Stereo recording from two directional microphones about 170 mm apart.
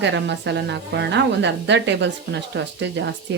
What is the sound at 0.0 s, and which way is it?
A woman's voice, 90° right.